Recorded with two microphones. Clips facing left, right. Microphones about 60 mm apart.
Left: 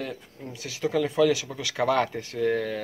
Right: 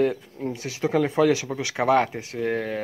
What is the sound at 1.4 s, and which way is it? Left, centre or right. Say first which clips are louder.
Speech: right 3 dB; right.